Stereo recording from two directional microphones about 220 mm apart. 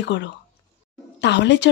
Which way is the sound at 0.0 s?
55° left (ahead or behind).